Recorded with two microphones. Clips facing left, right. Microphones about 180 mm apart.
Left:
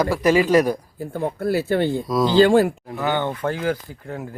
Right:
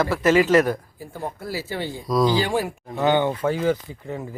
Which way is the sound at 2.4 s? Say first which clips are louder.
Left 9 dB; 60° left (ahead or behind).